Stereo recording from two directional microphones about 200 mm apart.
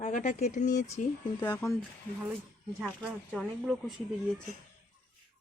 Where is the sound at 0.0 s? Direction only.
40° left (ahead or behind).